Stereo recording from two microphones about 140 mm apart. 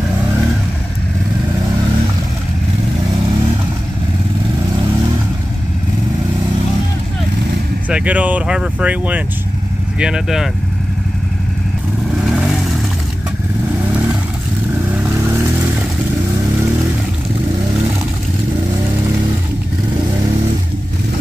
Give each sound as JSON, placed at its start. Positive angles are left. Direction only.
{"t": 7.9, "sound": "speech", "side_deg": -10}
{"t": 15.0, "sound": "vehicle", "side_deg": -15}